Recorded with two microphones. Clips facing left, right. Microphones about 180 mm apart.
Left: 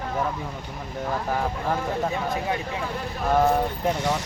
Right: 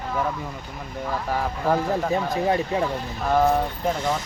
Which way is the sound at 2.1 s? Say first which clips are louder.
Right 5 dB; 40° right (ahead or behind).